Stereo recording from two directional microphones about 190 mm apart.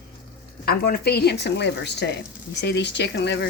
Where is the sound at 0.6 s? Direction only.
55° left (ahead or behind).